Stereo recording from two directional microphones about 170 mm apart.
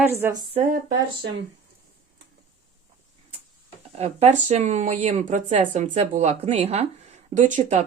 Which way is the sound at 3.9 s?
40° right (ahead or behind).